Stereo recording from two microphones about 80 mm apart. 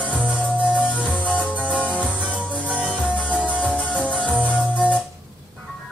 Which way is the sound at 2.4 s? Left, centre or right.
Centre.